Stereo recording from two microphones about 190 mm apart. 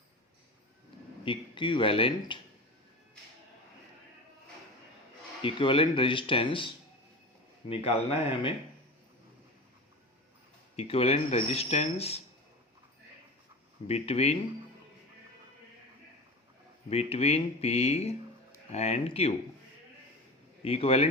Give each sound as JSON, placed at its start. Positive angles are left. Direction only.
{"t": 1.2, "sound": "speech", "side_deg": 25}
{"t": 5.4, "sound": "speech", "side_deg": 30}
{"t": 10.8, "sound": "speech", "side_deg": 30}
{"t": 13.8, "sound": "speech", "side_deg": 35}
{"t": 16.9, "sound": "speech", "side_deg": 35}
{"t": 20.6, "sound": "speech", "side_deg": 30}